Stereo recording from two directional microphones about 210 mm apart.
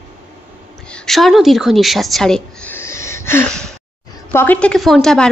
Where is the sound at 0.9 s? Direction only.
5° left (ahead or behind).